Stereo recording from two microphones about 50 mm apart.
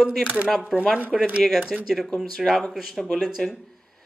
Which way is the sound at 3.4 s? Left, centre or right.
Centre.